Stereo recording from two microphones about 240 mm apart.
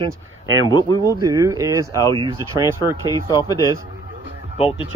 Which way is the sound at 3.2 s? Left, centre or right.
Centre.